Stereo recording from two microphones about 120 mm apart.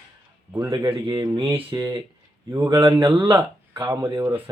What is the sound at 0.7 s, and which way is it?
Speech, 40° right (ahead or behind).